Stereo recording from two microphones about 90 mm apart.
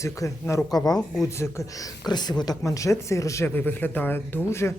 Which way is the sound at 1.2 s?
30° left (ahead or behind).